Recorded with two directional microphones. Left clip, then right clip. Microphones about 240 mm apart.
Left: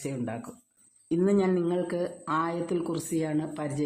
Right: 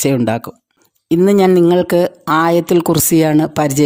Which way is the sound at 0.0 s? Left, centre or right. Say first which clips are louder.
Right 19 dB; right.